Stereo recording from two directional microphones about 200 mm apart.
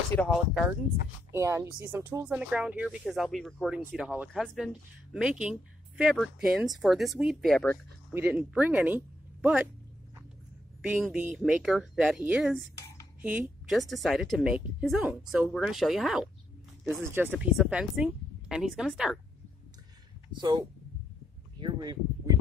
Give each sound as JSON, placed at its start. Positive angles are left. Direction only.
{"t": 0.3, "sound": "a woman's voice", "side_deg": -5}
{"t": 1.3, "sound": "a woman's voice", "side_deg": -15}
{"t": 8.1, "sound": "speech", "side_deg": -10}
{"t": 10.8, "sound": "a woman's voice", "side_deg": -5}
{"t": 20.2, "sound": "speech", "side_deg": -20}
{"t": 21.5, "sound": "a sound", "side_deg": -20}